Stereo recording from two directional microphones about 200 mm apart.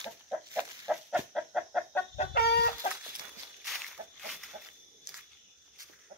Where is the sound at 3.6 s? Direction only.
Centre (ahead or behind).